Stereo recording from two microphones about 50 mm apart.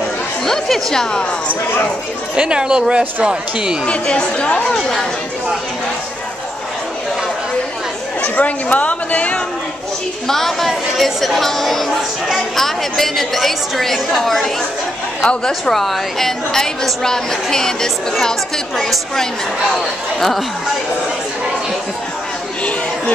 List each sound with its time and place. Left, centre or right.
0.5 s a woman's voice: centre
2.3 s speech: centre
3.8 s speech: centre
8.2 s speech: left
10.2 s a woman's voice: centre